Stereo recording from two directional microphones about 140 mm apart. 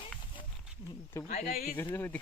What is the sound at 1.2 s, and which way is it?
Speech, 70° left (ahead or behind).